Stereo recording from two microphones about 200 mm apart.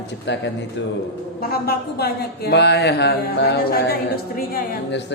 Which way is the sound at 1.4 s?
50° left (ahead or behind).